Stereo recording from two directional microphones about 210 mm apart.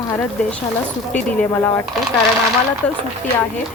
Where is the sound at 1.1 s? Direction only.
5° left (ahead or behind).